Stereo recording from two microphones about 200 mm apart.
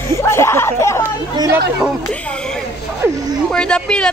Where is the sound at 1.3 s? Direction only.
20° right (ahead or behind).